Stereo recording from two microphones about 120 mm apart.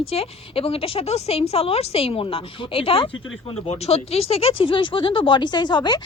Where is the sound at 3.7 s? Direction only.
60° left (ahead or behind).